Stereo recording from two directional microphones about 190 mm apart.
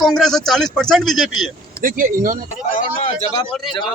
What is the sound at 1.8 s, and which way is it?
Speech, 45° right (ahead or behind).